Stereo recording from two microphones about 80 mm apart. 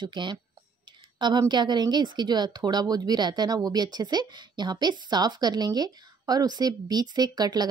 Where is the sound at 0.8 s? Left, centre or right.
Right.